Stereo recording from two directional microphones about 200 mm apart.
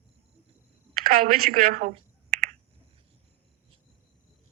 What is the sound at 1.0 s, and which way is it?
Speech, 45° right (ahead or behind).